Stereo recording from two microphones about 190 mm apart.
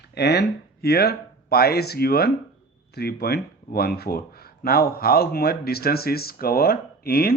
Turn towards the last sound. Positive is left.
turn(degrees=55)  # may be behind; listen again after turning